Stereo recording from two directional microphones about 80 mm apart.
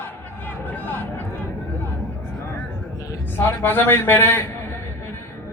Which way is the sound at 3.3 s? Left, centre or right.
Left.